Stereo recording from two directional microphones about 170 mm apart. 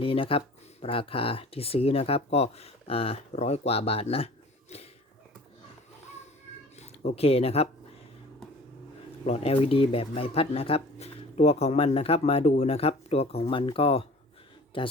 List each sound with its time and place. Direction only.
0.0 s speech: 30° left (ahead or behind)
4.7 s a sound: 40° left (ahead or behind)
6.7 s speech: 40° left (ahead or behind)
9.2 s speech: 35° left (ahead or behind)